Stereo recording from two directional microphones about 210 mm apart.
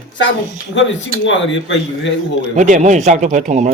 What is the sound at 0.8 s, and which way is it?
A man's voice, 55° left (ahead or behind).